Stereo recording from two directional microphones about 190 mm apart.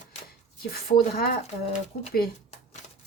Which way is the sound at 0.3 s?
50° left (ahead or behind).